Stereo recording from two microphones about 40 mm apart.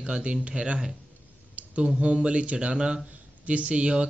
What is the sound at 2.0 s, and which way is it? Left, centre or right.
Speech, right.